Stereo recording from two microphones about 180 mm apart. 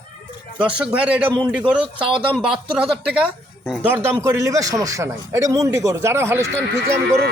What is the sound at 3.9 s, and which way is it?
A man's voice, 15° right (ahead or behind).